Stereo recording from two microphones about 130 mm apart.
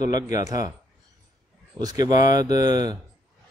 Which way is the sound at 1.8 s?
30° right (ahead or behind).